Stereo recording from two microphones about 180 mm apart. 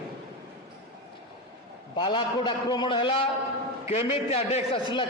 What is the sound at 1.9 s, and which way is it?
A man's voice, 25° left (ahead or behind).